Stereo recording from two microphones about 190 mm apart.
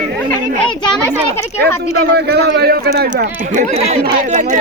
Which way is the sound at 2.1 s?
60° right (ahead or behind).